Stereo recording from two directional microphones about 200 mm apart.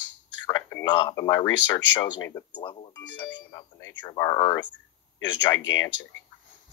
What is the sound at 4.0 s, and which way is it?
Speech, 15° left (ahead or behind).